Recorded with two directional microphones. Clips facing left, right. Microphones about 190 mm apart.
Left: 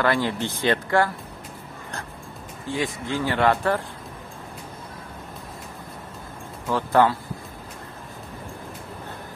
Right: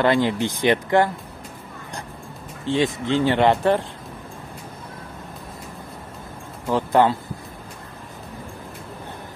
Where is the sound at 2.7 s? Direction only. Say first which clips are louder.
Right 6 dB; 25° right (ahead or behind).